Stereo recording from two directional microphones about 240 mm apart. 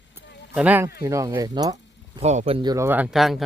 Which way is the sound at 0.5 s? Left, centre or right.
Centre.